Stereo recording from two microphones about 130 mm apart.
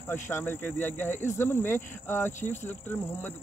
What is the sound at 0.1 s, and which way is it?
Speech, 20° left (ahead or behind).